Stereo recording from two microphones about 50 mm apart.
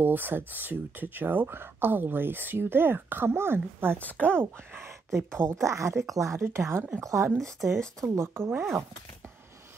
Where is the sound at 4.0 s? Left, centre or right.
Left.